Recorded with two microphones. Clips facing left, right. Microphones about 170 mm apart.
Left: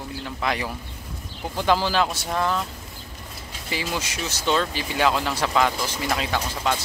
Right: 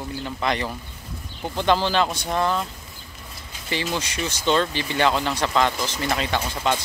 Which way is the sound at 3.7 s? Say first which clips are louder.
Right 2 dB; 5° left (ahead or behind).